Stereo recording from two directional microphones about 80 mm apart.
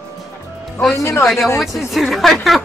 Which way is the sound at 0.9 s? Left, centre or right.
Left.